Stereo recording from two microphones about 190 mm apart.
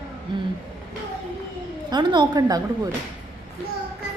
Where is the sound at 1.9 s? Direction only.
20° right (ahead or behind).